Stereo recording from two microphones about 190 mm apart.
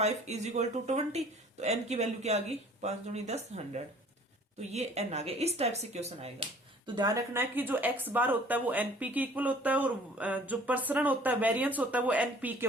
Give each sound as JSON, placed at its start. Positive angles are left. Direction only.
{"t": 0.0, "sound": "speech", "side_deg": -35}
{"t": 6.8, "sound": "speech", "side_deg": -20}